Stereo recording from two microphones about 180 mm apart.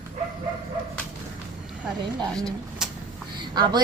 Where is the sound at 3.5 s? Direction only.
25° right (ahead or behind).